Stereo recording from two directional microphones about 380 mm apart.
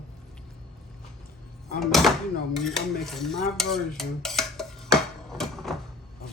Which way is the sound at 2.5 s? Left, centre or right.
Centre.